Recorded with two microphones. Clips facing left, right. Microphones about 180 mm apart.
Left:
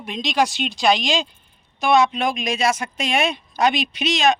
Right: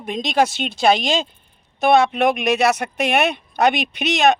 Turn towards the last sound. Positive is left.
turn(degrees=-60)  # may be behind; listen again after turning